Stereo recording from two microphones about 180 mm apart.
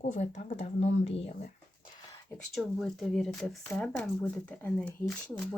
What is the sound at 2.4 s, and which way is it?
Speech, centre (ahead or behind).